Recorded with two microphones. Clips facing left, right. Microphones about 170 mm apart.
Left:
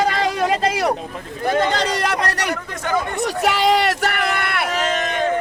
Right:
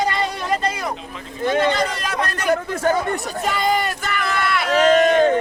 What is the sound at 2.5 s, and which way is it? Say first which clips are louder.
Speech: right 4 dB; 40° right (ahead or behind).